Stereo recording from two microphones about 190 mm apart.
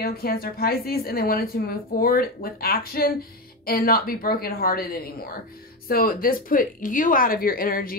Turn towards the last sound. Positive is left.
turn(degrees=50)  # may be behind; listen again after turning